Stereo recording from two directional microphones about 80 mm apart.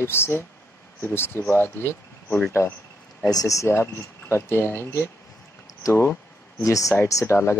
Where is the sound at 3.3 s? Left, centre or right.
Left.